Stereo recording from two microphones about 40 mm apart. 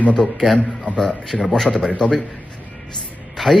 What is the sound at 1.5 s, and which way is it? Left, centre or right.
Speech, centre.